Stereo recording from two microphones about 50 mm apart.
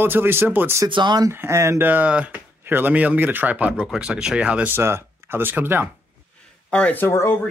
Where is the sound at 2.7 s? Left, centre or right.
Right.